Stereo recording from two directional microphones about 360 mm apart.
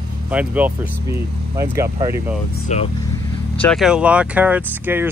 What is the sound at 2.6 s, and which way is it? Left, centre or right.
Speech, centre.